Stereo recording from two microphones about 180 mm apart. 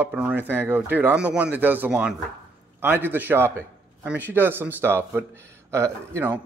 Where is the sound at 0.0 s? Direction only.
10° right (ahead or behind).